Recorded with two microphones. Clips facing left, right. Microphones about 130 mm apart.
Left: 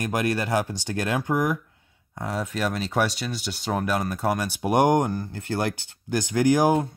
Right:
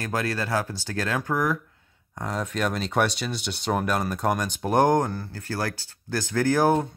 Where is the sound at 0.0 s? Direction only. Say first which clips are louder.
Left 3 dB; 15° left (ahead or behind).